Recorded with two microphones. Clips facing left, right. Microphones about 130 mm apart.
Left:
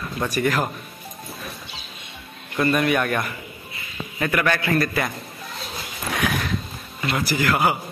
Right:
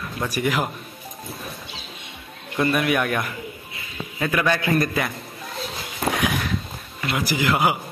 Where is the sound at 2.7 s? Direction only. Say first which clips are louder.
Left 2 dB; 5° right (ahead or behind).